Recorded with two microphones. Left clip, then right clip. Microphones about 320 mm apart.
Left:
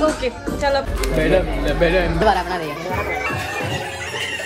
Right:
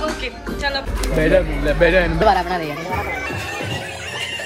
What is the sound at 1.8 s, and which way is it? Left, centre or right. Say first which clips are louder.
Speech: right 2 dB; right.